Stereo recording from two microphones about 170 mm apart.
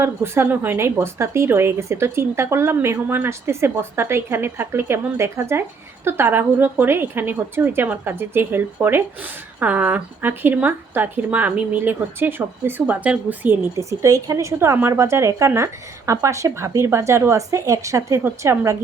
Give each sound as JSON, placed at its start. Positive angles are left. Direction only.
{"t": 0.0, "sound": "speech", "side_deg": -15}